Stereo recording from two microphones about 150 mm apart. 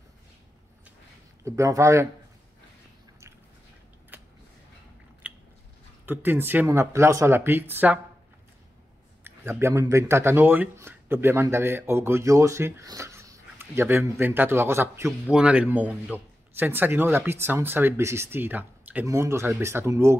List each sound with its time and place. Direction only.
1.4 s speech: 20° right (ahead or behind)
4.1 s a sound: 10° right (ahead or behind)
5.2 s biting: 10° right (ahead or behind)
6.0 s speech: 15° right (ahead or behind)
9.2 s speech: 15° right (ahead or behind)